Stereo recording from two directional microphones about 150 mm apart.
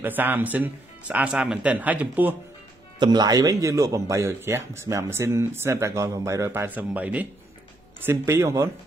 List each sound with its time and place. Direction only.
0.0 s speech: 15° right (ahead or behind)
3.0 s a man's voice: 30° right (ahead or behind)